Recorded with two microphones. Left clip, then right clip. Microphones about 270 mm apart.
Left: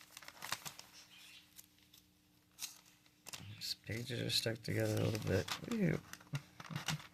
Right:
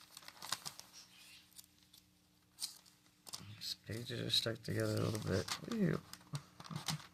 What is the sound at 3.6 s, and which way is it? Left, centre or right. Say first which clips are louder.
Speech: left 2 dB; left.